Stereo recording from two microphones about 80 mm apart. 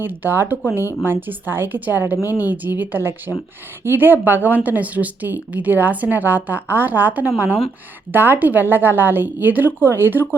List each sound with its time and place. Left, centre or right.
0.0 s a woman's voice: right
2.1 s a woman's voice: left
2.4 s a woman's voice: right